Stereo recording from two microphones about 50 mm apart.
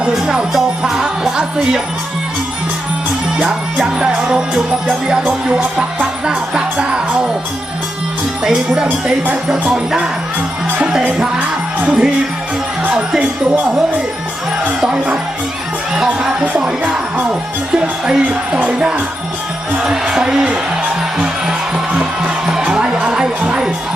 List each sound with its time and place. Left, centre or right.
0.2 s speech: centre
3.3 s music: centre
6.2 s speech: centre
8.4 s speech: centre
10.8 s music: centre
11.3 s music: right
14.8 s speech: centre
16.0 s music: centre
17.7 s music: centre
19.8 s speech: centre
21.9 s music: centre